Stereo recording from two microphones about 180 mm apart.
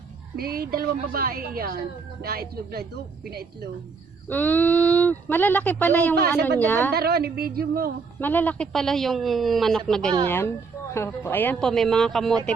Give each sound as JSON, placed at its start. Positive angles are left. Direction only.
{"t": 0.3, "sound": "a woman's voice", "side_deg": -60}
{"t": 4.3, "sound": "speech", "side_deg": 10}
{"t": 6.9, "sound": "a woman's voice", "side_deg": -60}
{"t": 8.2, "sound": "a woman's voice", "side_deg": 10}